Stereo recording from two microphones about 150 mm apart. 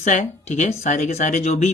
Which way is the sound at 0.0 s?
55° left (ahead or behind).